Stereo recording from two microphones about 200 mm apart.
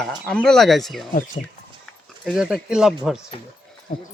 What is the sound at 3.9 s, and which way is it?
Speech, 40° left (ahead or behind).